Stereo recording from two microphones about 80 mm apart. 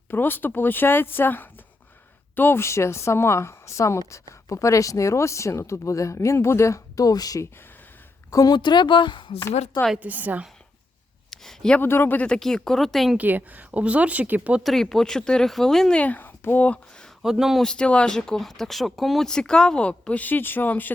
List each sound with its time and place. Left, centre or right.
0.1 s speech: left
8.5 s speech: left
10.0 s speech: right
11.3 s speech: centre
11.8 s speech: left; by 13.1 s centre
13.1 s speech: right
14.6 s speech: centre
16.0 s speech: left
17.2 s speech: centre
17.6 s speech: centre